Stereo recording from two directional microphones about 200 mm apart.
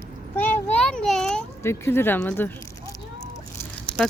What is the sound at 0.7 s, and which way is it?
A child's voice, 5° left (ahead or behind).